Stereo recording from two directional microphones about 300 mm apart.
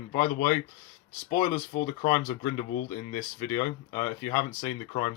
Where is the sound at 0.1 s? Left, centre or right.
Centre.